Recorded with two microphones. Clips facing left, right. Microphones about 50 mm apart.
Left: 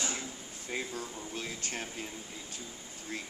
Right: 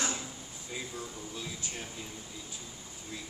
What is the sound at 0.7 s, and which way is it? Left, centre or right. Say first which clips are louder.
A man's voice: left 3 dB; left.